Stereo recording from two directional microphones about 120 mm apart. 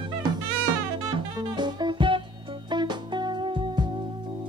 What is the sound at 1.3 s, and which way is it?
Music, 35° right (ahead or behind).